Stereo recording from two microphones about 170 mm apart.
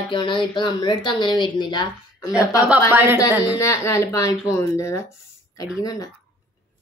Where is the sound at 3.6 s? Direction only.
15° left (ahead or behind).